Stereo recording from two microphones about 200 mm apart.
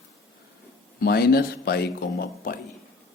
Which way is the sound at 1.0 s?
50° left (ahead or behind).